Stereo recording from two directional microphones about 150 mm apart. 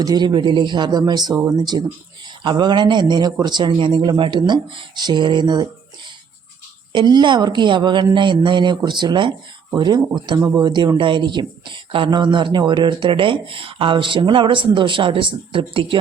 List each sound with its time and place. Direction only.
0.0 s speech: 25° right (ahead or behind)
6.9 s speech: 30° right (ahead or behind)